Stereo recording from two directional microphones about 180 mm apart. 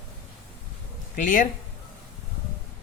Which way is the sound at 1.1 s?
45° left (ahead or behind).